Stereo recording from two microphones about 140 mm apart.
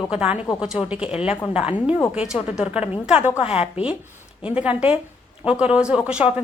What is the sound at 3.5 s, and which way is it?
Speech, 45° left (ahead or behind).